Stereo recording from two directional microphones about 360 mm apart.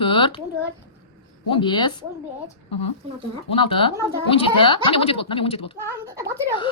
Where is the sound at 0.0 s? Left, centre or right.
Centre.